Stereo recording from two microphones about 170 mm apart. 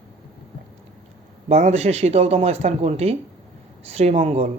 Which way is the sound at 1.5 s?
40° right (ahead or behind).